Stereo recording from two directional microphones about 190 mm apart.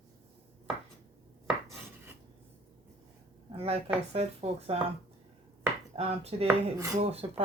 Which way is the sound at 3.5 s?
30° right (ahead or behind).